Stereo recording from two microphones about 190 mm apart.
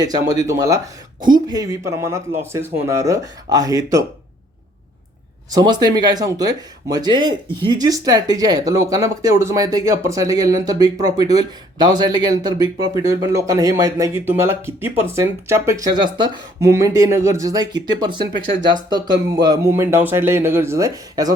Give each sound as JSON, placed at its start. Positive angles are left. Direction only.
{"t": 0.0, "sound": "speech", "side_deg": -20}
{"t": 5.5, "sound": "speech", "side_deg": -20}